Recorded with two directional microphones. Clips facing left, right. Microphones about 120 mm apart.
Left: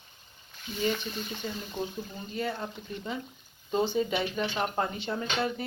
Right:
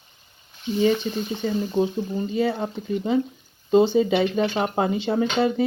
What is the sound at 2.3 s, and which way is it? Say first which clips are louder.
Speech: right 7 dB; 90° right.